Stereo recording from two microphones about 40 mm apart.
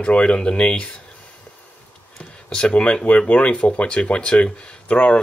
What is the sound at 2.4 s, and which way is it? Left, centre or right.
Speech, left.